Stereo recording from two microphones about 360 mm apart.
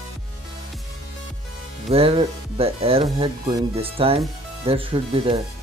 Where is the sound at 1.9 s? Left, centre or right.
Centre.